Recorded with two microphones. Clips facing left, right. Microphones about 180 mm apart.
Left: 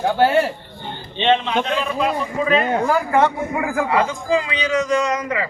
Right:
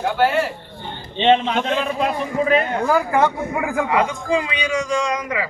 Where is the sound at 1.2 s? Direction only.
35° right (ahead or behind).